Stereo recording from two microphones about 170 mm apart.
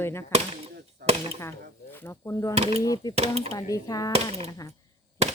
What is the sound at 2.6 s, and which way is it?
Speech, 35° right (ahead or behind).